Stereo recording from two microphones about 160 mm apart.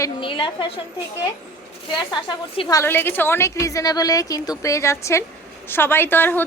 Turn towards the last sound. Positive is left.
turn(degrees=10)  # may be behind; listen again after turning